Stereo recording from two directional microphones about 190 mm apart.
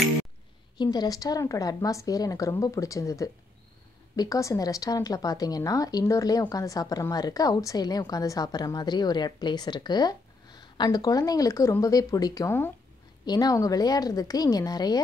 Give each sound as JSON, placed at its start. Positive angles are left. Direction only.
{"t": 0.7, "sound": "a woman's voice", "side_deg": 20}